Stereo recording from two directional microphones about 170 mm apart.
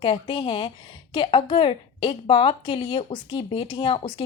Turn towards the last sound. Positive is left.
turn(degrees=30)  # may be behind; listen again after turning